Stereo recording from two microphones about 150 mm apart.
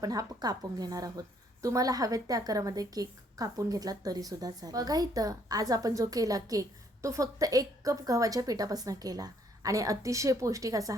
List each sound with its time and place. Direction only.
0.0 s a woman's voice: 25° right (ahead or behind)